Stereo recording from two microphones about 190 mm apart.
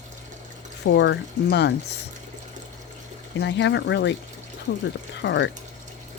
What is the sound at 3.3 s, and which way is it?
Speech, 65° left (ahead or behind).